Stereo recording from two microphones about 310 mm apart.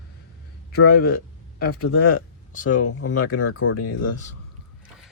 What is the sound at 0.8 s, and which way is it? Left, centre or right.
Speech, left.